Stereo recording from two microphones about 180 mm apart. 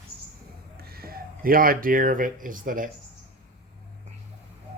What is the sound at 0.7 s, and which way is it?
Speech, 60° right (ahead or behind).